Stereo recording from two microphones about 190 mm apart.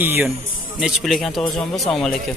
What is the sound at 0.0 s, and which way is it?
A man's voice, 10° right (ahead or behind).